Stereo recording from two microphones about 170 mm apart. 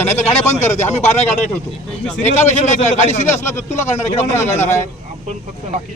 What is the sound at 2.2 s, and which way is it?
A man's voice, 45° left (ahead or behind).